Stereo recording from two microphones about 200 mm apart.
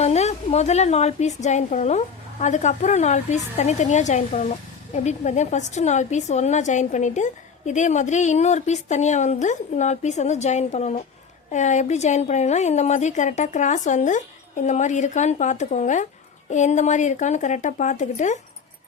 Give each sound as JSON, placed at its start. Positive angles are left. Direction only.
{"t": 0.0, "sound": "a woman's voice", "side_deg": 35}